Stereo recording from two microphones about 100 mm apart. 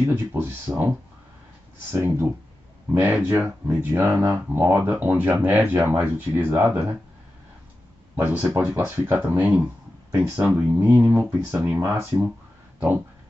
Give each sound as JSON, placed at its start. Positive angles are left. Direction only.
{"t": 0.1, "sound": "speech", "side_deg": -25}
{"t": 1.9, "sound": "speech", "side_deg": -25}
{"t": 8.2, "sound": "speech", "side_deg": -20}